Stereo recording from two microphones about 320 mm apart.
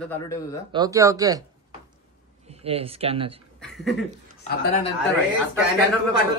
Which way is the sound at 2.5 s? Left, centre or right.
Centre.